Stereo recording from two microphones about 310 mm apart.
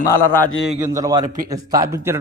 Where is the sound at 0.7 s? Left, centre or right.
Centre.